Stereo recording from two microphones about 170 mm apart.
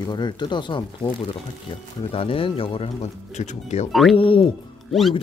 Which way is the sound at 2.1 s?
35° left (ahead or behind).